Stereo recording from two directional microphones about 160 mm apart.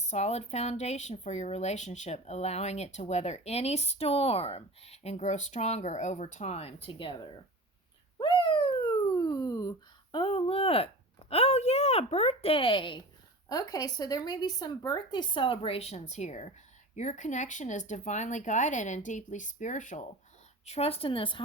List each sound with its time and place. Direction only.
0.1 s speech: 45° left (ahead or behind)
8.2 s a sound: 30° left (ahead or behind)
11.3 s a woman's voice: 40° left (ahead or behind)
20.7 s a woman's voice: 40° left (ahead or behind)